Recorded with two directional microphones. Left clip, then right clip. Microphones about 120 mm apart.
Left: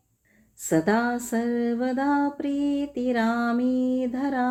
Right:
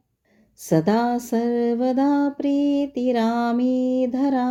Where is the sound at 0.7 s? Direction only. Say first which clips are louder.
Right 3 dB; 35° right (ahead or behind).